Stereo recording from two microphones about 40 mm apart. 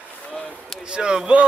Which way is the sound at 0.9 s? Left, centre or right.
Centre.